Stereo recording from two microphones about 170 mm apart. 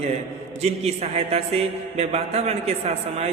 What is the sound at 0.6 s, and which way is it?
A man's voice, 40° right (ahead or behind).